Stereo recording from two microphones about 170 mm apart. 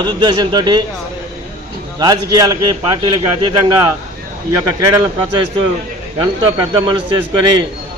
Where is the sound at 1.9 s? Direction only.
25° right (ahead or behind).